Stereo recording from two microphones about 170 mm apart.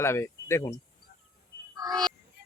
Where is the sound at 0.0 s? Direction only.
15° left (ahead or behind).